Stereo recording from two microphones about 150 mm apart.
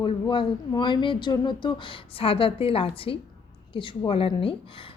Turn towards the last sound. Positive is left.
turn(degrees=40)  # may be behind; listen again after turning